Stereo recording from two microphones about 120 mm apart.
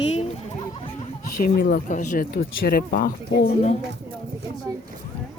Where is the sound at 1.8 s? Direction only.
90° left.